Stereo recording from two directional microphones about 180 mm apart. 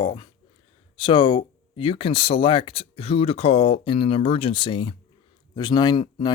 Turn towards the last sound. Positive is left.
turn(degrees=25)  # may be behind; listen again after turning